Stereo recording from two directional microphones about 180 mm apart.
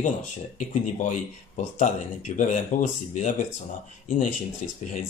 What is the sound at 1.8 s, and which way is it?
Speech, 45° left (ahead or behind).